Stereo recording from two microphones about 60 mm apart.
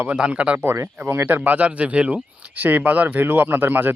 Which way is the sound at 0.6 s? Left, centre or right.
Right.